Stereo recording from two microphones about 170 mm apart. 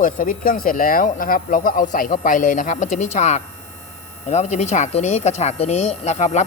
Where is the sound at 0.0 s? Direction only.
55° left (ahead or behind).